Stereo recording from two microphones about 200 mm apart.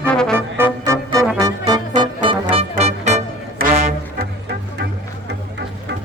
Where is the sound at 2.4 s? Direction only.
30° right (ahead or behind).